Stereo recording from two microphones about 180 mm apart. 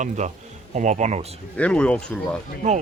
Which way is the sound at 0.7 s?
40° right (ahead or behind).